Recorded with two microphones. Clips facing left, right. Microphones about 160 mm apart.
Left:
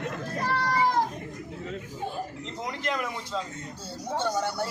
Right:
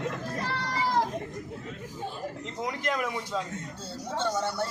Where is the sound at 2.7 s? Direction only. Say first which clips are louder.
Right 1 dB; centre (ahead or behind).